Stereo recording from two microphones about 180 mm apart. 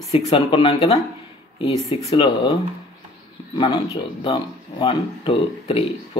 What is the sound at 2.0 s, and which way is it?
Speech, 25° left (ahead or behind).